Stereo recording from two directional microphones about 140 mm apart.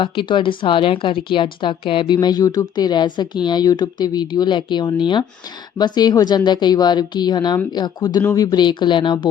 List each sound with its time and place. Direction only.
0.0 s a woman's voice: 35° left (ahead or behind)